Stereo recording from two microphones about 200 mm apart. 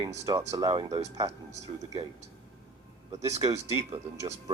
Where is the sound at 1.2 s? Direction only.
35° right (ahead or behind).